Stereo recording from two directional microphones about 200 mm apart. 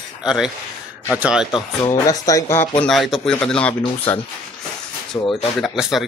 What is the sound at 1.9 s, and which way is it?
Speech, 15° left (ahead or behind).